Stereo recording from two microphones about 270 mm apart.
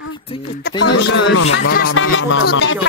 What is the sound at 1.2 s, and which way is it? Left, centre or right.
Speech, left.